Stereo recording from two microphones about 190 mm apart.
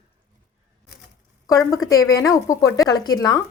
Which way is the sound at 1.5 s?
15° left (ahead or behind).